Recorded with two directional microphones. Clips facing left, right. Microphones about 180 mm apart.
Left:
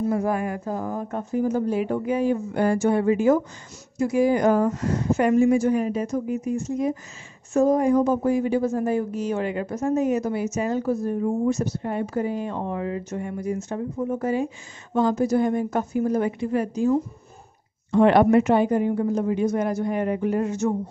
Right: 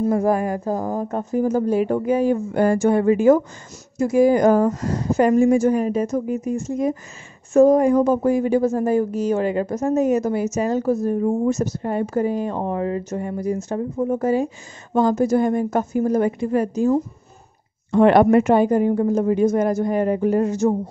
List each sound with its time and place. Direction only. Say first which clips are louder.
0.0 s a woman's voice: right 5 dB; 45° right (ahead or behind)
17.9 s a woman's voice: right 3 dB; 50° right (ahead or behind)